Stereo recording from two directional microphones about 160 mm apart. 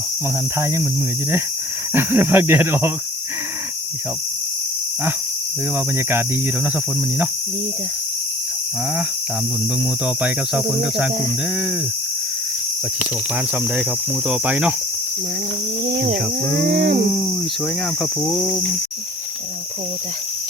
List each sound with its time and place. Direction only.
0.6 s speech: 15° right (ahead or behind)
1.9 s speech: 15° right (ahead or behind)
5.7 s speech: 15° right (ahead or behind)
10.2 s speech: 10° right (ahead or behind)
14.3 s speech: 10° right (ahead or behind)
16.6 s a sound: 85° right
18.0 s cricket: centre (ahead or behind)